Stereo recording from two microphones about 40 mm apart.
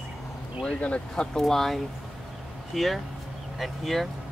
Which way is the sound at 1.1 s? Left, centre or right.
Centre.